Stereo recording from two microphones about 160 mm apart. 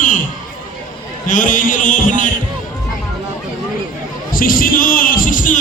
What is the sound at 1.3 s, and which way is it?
A man's voice, 55° left (ahead or behind).